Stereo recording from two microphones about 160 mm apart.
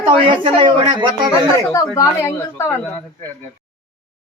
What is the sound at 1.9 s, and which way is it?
Speech, 20° left (ahead or behind).